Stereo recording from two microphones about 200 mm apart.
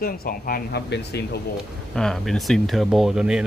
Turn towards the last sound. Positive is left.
turn(degrees=-5)  # may be behind; listen again after turning